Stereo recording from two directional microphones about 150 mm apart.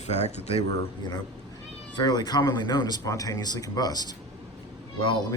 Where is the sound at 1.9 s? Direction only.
30° left (ahead or behind).